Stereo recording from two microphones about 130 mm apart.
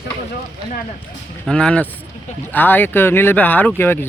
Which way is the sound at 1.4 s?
5° left (ahead or behind).